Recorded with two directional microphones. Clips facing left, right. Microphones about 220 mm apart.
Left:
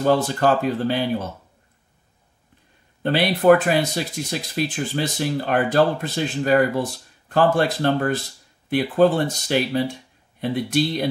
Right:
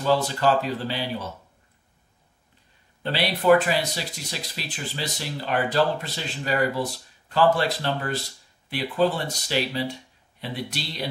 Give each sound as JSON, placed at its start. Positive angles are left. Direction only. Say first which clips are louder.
{"t": 0.0, "sound": "speech", "louder": "left 3 dB", "side_deg": 50}
{"t": 3.0, "sound": "speech", "louder": "left 6 dB", "side_deg": 50}